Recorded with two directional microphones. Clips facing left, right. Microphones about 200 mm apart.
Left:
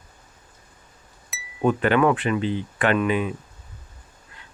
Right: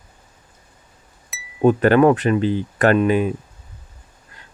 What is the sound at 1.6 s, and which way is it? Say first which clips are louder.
Speech: right 6 dB; 40° right (ahead or behind).